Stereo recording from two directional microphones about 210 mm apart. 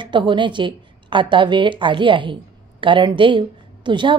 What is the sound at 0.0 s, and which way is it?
A woman's voice, 20° right (ahead or behind).